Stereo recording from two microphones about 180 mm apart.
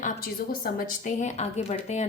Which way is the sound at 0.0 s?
55° left (ahead or behind).